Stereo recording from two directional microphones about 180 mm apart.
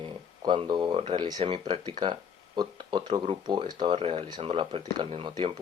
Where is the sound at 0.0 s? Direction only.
25° right (ahead or behind).